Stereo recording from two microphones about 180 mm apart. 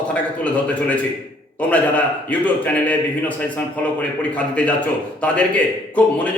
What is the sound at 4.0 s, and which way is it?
A man's voice, 5° left (ahead or behind).